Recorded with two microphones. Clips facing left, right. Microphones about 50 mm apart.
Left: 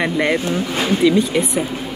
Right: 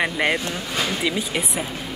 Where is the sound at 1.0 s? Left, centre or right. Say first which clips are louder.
Left 9 dB; centre.